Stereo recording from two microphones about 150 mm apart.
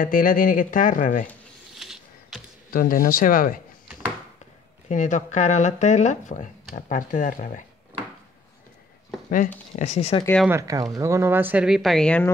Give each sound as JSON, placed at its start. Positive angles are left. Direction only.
{"t": 0.0, "sound": "speech", "side_deg": 65}
{"t": 1.8, "sound": "a sound", "side_deg": -5}
{"t": 2.7, "sound": "speech", "side_deg": 70}
{"t": 4.8, "sound": "speech", "side_deg": 55}
{"t": 9.8, "sound": "speech", "side_deg": 50}
{"t": 10.5, "sound": "speech", "side_deg": -20}